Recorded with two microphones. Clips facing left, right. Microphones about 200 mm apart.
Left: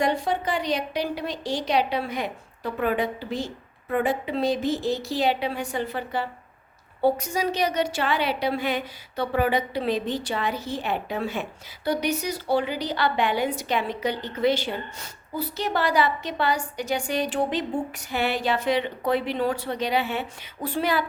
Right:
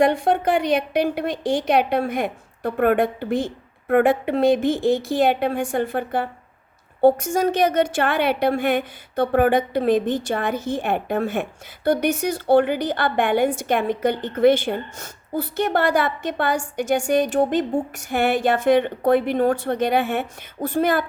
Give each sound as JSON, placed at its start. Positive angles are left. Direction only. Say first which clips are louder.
{"t": 0.0, "sound": "a woman's voice", "louder": "right 6 dB", "side_deg": -55}